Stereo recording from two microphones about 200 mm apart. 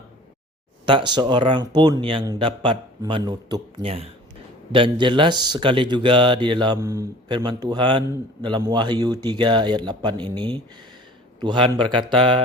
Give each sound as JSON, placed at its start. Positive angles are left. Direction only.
{"t": 0.9, "sound": "speech", "side_deg": -25}